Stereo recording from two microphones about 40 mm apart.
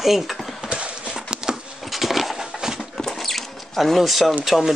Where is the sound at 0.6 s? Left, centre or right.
Right.